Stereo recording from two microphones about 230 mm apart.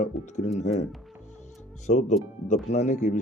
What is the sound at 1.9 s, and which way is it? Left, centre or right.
Speech, left.